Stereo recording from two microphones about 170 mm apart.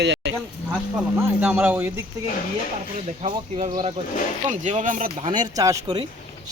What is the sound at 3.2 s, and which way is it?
Speech, 45° right (ahead or behind).